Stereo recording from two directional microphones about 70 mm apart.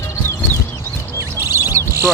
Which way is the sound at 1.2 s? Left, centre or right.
Right.